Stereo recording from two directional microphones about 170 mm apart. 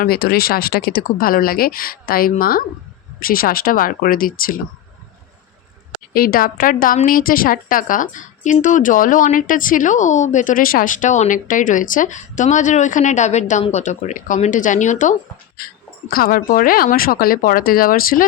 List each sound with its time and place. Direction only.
0.0 s a woman's voice: 65° left (ahead or behind)
6.1 s a woman's voice: 60° left (ahead or behind)
15.5 s a woman's voice: 60° left (ahead or behind)